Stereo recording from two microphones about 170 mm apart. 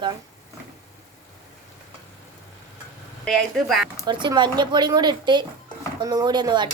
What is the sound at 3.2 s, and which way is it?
Speech, centre (ahead or behind).